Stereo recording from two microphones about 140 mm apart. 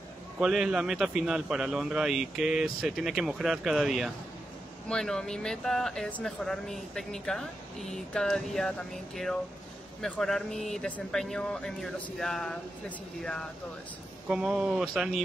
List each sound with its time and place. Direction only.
0.4 s speech: 5° right (ahead or behind)
14.3 s speech: 5° right (ahead or behind)